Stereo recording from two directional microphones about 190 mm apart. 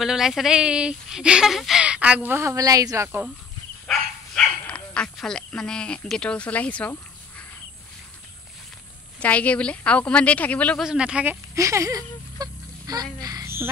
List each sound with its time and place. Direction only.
0.0 s speech: centre (ahead or behind)
3.8 s bow-wow: 5° left (ahead or behind)
9.2 s a woman's voice: 5° left (ahead or behind)
10.9 s speech: 5° right (ahead or behind)
11.5 s a sound: 15° right (ahead or behind)